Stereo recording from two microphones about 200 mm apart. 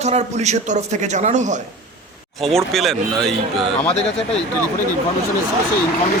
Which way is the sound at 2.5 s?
Centre (ahead or behind).